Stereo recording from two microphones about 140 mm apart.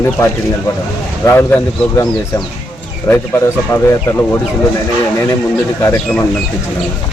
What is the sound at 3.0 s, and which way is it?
A man's voice, 15° left (ahead or behind).